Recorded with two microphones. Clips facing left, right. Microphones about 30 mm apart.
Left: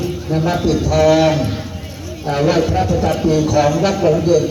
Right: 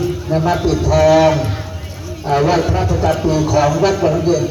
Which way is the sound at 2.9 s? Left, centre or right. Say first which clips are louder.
Right 1 dB; right.